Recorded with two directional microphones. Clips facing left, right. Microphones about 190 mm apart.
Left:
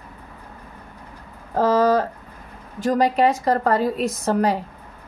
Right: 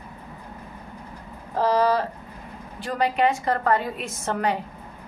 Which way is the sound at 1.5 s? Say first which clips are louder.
Left 4 dB; 45° left (ahead or behind).